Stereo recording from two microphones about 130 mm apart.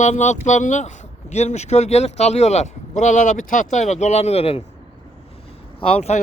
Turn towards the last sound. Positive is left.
turn(degrees=50)  # may be behind; listen again after turning